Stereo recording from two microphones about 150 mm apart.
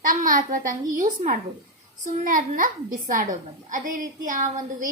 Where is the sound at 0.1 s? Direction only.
60° right (ahead or behind).